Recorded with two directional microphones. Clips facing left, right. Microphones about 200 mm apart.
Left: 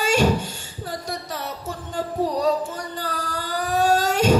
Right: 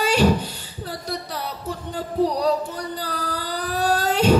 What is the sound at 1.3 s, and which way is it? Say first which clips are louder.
Music: right 1 dB; 45° left (ahead or behind).